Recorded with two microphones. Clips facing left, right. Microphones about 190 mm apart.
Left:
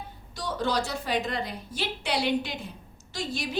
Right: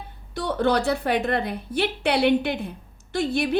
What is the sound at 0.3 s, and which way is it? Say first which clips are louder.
A woman's voice: right 6 dB; 60° right (ahead or behind).